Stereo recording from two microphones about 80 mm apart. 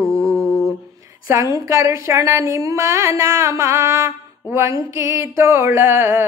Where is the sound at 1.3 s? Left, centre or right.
Right.